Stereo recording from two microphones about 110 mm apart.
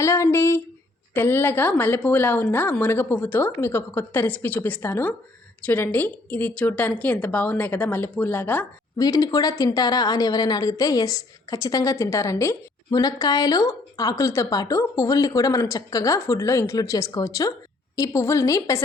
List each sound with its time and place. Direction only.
0.0 s a woman's voice: 25° left (ahead or behind)
9.0 s a woman's voice: 35° left (ahead or behind)